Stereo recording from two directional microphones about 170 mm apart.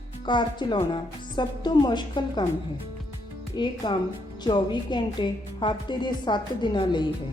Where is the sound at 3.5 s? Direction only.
25° left (ahead or behind).